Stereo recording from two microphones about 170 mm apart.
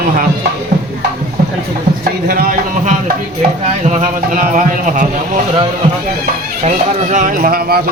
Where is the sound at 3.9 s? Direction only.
50° right (ahead or behind).